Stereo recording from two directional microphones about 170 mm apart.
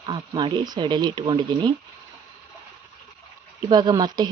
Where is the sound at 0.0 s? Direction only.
30° right (ahead or behind).